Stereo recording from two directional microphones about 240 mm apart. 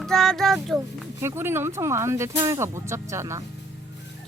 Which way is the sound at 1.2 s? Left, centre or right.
Centre.